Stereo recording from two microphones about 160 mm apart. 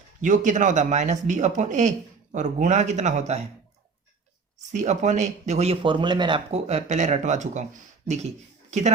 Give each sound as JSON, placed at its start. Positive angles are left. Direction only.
{"t": 0.2, "sound": "speech", "side_deg": -50}
{"t": 4.7, "sound": "speech", "side_deg": -50}
{"t": 6.5, "sound": "speech", "side_deg": -45}